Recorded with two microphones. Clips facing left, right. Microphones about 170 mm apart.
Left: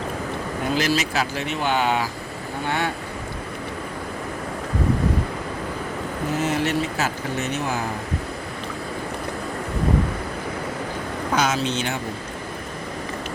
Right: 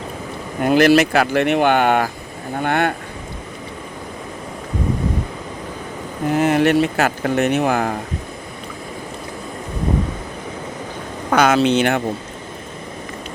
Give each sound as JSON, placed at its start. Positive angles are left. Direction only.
{"t": 0.6, "sound": "speech", "side_deg": -65}
{"t": 6.4, "sound": "speech", "side_deg": -60}
{"t": 11.3, "sound": "speech", "side_deg": -60}